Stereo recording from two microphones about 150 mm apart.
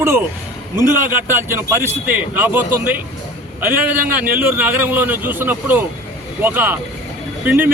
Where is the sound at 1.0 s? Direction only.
15° right (ahead or behind).